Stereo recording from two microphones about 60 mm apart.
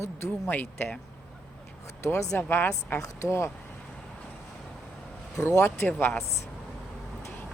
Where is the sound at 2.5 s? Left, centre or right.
Left.